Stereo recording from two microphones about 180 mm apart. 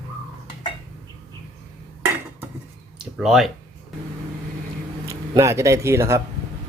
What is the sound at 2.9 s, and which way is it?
Speech, 5° right (ahead or behind).